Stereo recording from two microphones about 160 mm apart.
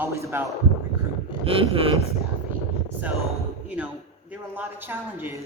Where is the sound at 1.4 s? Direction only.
35° right (ahead or behind).